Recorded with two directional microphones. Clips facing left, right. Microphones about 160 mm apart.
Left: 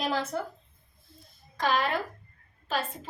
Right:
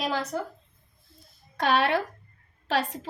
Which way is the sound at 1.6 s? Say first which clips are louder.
Right 4 dB; 70° right (ahead or behind).